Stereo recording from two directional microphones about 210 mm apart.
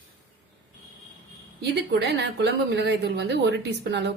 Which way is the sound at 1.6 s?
55° right (ahead or behind).